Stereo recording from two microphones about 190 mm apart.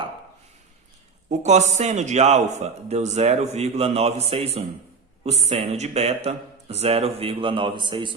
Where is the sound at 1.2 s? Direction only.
35° right (ahead or behind).